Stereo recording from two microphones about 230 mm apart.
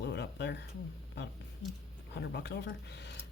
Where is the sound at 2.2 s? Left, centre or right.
Left.